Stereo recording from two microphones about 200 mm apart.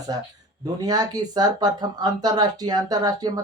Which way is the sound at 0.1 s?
20° right (ahead or behind).